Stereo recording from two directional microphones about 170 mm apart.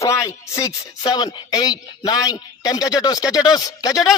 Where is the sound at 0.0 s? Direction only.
20° left (ahead or behind).